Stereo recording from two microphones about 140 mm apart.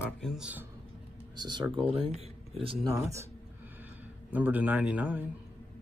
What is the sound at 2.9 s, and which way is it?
Speech, 20° right (ahead or behind).